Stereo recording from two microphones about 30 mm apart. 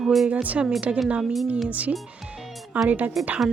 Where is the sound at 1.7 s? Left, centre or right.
Right.